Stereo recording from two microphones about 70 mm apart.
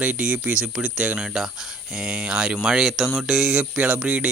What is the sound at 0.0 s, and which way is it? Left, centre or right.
Speech, centre.